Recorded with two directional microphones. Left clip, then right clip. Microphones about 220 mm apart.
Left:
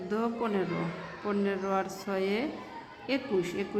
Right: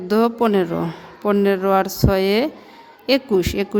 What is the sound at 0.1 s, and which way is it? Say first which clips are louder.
A woman's voice: right 14 dB; 55° right (ahead or behind).